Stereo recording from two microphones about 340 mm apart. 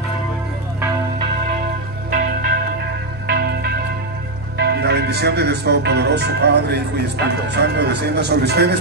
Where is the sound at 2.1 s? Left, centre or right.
Right.